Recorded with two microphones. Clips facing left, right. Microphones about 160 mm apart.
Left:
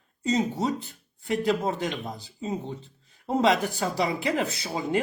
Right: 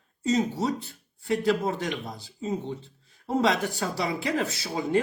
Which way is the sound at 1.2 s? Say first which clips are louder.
Even; 20° left (ahead or behind).